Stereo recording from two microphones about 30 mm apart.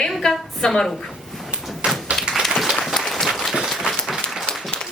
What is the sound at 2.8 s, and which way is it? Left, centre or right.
Applause, centre.